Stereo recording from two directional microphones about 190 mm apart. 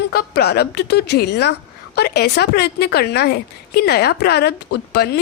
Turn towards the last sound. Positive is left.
turn(degrees=60)  # may be behind; listen again after turning